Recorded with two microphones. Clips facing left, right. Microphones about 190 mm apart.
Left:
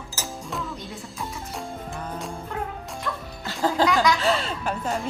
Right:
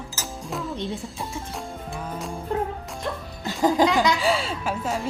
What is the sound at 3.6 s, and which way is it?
Laughter, 15° right (ahead or behind).